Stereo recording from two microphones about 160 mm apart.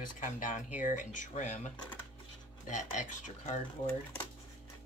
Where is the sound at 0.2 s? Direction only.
55° left (ahead or behind).